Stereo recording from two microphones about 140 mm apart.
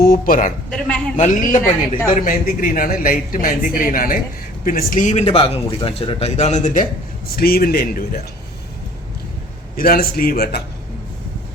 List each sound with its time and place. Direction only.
0.0 s a woman's voice: 85° left
0.7 s a woman's voice: 5° left (ahead or behind)
1.1 s speech: 60° left (ahead or behind)
2.0 s a man's voice: 80° left
4.6 s a man's voice: 80° left; by 6.8 s 55° left (ahead or behind)
7.3 s speech: 90° left
9.7 s speech: 90° left